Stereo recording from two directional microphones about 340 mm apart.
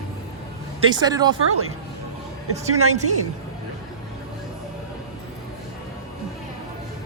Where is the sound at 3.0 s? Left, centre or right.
Right.